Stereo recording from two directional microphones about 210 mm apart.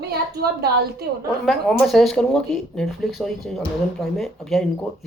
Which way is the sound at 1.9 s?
Centre (ahead or behind).